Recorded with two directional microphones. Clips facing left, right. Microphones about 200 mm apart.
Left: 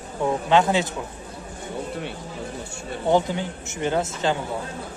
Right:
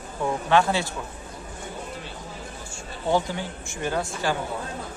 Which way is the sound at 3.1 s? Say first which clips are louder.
Left 3 dB; 20° left (ahead or behind).